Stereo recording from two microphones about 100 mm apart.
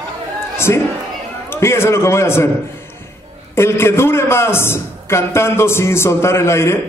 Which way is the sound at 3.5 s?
25° left (ahead or behind).